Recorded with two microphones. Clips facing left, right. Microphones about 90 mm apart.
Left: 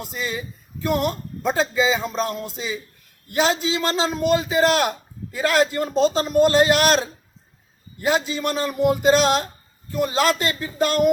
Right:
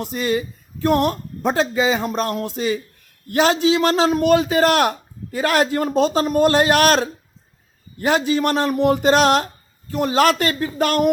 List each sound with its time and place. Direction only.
0.2 s speech: 55° right (ahead or behind)